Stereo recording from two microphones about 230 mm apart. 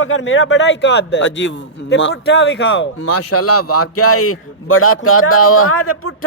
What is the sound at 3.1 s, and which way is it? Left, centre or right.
A man's voice, left.